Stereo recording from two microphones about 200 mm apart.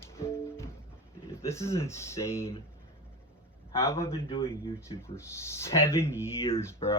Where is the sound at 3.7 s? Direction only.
15° left (ahead or behind).